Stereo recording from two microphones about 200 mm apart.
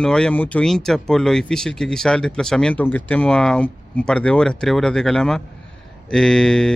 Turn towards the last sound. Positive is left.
turn(degrees=5)  # may be behind; listen again after turning